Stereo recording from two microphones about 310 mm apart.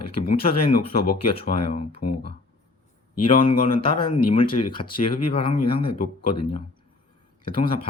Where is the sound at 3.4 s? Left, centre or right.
Centre.